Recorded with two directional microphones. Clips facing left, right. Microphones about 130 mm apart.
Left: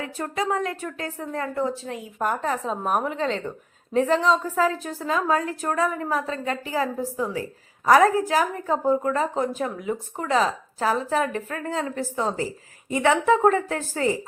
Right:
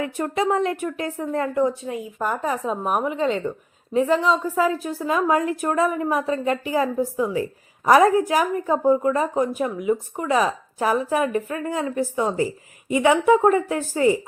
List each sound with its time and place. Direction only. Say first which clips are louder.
0.0 s speech: right 5 dB; 20° right (ahead or behind)